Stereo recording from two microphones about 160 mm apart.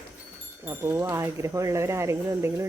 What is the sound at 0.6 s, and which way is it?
Speech, 15° right (ahead or behind).